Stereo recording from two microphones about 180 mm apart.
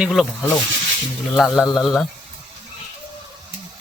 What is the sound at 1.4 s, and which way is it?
Speech, centre (ahead or behind).